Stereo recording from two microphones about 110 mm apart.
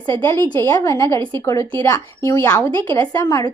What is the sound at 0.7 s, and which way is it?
A woman's voice, 30° left (ahead or behind).